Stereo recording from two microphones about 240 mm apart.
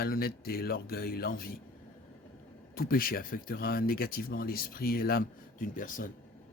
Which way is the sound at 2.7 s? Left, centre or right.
Left.